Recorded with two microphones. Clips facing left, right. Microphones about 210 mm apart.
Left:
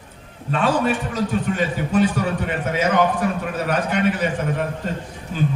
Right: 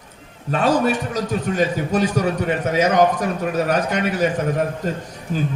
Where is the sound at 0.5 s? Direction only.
40° right (ahead or behind).